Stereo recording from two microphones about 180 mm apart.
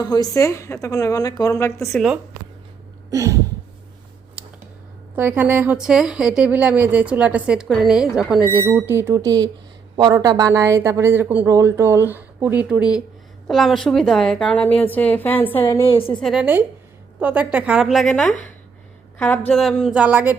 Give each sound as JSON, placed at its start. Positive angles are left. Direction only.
{"t": 0.0, "sound": "a woman's voice", "side_deg": 20}
{"t": 1.9, "sound": "a woman's voice", "side_deg": 0}
{"t": 3.1, "sound": "a sound", "side_deg": -15}
{"t": 5.1, "sound": "a woman's voice", "side_deg": -10}
{"t": 15.9, "sound": "a woman's voice", "side_deg": 30}
{"t": 16.2, "sound": "a woman's voice", "side_deg": -5}
{"t": 20.0, "sound": "speech", "side_deg": -10}